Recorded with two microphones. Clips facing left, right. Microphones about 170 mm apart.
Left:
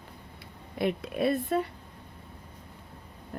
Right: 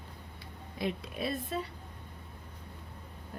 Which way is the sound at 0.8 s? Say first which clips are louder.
Left 7 dB; 60° left (ahead or behind).